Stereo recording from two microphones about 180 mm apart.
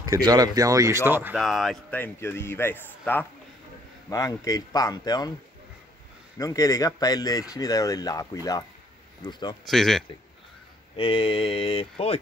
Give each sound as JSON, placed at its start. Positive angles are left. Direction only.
{"t": 0.0, "sound": "speech", "side_deg": -20}
{"t": 1.4, "sound": "speech", "side_deg": 0}
{"t": 6.3, "sound": "speech", "side_deg": 20}
{"t": 9.7, "sound": "speech", "side_deg": 0}
{"t": 11.0, "sound": "mantra", "side_deg": 30}